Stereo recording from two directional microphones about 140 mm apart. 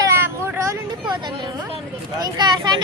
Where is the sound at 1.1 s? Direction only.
35° right (ahead or behind).